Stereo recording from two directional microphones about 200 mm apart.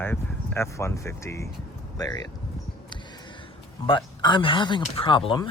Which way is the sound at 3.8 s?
25° left (ahead or behind).